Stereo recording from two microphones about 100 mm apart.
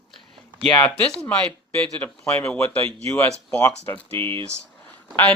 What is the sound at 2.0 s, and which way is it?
Speech, 15° left (ahead or behind).